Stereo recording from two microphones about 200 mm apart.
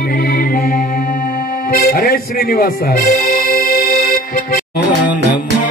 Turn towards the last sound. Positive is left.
turn(degrees=50)  # may be behind; listen again after turning